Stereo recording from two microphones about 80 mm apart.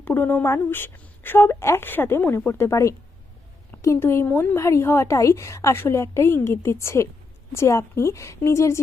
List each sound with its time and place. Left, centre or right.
0.0 s a woman's voice: left
4.0 s a woman's voice: left